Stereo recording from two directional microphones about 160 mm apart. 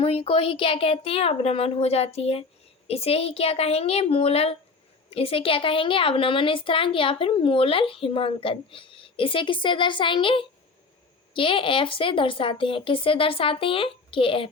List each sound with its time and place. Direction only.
0.0 s a woman's voice: 35° left (ahead or behind)